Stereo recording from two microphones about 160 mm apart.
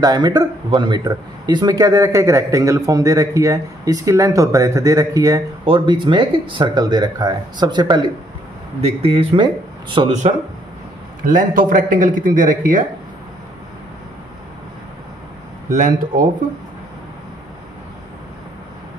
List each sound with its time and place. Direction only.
0.0 s speech: 25° right (ahead or behind)
8.8 s speech: 35° right (ahead or behind)
11.2 s speech: 55° right (ahead or behind)
15.7 s speech: 55° right (ahead or behind)